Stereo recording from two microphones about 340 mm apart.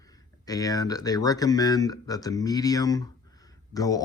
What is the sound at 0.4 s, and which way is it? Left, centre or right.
Speech, centre.